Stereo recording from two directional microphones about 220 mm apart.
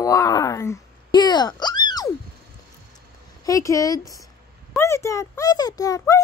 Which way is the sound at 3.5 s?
15° left (ahead or behind).